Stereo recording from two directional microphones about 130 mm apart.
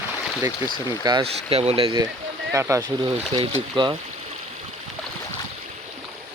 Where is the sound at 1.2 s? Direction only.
50° right (ahead or behind).